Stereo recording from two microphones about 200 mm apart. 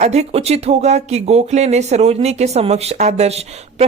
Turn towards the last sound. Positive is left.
turn(degrees=-30)  # may be behind; listen again after turning